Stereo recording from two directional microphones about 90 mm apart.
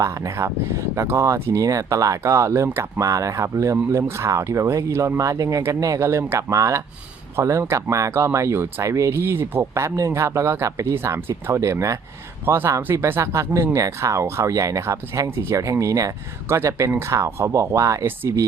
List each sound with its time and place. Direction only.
0.0 s speech: 35° right (ahead or behind)